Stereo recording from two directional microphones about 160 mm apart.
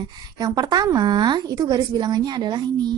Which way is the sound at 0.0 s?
25° right (ahead or behind).